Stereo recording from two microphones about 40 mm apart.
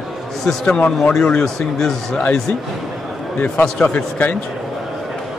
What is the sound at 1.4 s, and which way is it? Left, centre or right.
Speech, centre.